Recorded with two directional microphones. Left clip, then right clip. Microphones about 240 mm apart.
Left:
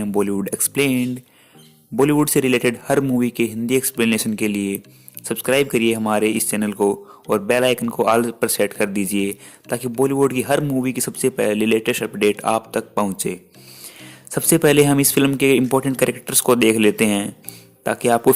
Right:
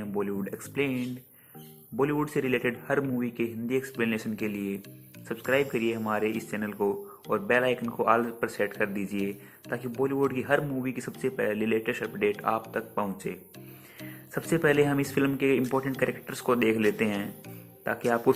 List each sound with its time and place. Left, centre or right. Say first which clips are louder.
0.0 s speech: left 11 dB; left
14.3 s speech: left 9 dB; left